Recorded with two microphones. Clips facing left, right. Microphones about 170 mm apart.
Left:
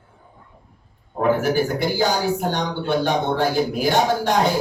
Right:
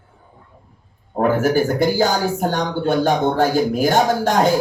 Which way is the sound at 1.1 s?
45° right (ahead or behind).